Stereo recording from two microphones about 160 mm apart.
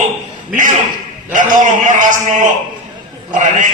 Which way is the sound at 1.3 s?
55° right (ahead or behind).